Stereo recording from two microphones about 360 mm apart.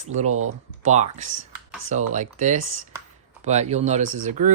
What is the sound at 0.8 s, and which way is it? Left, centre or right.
Speech, centre.